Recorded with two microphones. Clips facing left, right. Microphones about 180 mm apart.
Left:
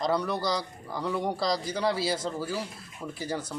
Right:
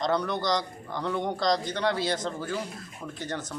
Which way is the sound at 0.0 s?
5° left (ahead or behind).